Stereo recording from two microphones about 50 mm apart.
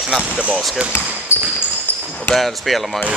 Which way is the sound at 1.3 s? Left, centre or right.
Left.